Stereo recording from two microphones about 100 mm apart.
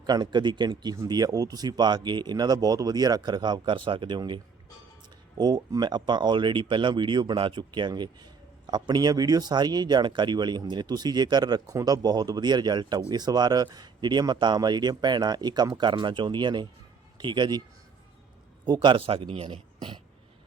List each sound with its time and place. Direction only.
0.0 s speech: 45° right (ahead or behind)
5.4 s speech: 40° right (ahead or behind)
18.6 s speech: 50° right (ahead or behind)